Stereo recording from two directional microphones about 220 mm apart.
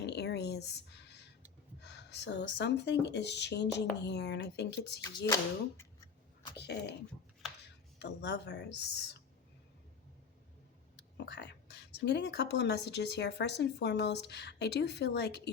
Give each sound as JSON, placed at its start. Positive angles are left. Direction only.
{"t": 0.0, "sound": "a sound", "side_deg": 50}
{"t": 1.8, "sound": "speech", "side_deg": 50}
{"t": 5.0, "sound": "speech", "side_deg": 15}
{"t": 6.6, "sound": "speech", "side_deg": 50}
{"t": 7.9, "sound": "speech", "side_deg": 50}
{"t": 11.3, "sound": "speech", "side_deg": 50}